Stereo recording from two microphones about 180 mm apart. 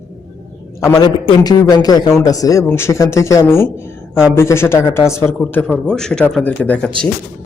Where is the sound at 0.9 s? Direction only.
20° left (ahead or behind).